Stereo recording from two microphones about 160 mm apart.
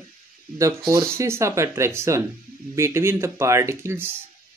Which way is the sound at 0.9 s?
20° right (ahead or behind).